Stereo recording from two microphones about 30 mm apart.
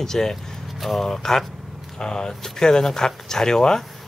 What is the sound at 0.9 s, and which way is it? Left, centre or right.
Speech, centre.